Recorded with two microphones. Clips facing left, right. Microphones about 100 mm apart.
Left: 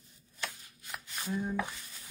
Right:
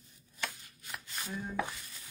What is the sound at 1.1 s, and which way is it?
Speech, 15° left (ahead or behind).